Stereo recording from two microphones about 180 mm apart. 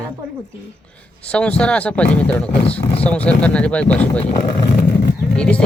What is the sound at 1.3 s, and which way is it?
Speech, 5° left (ahead or behind).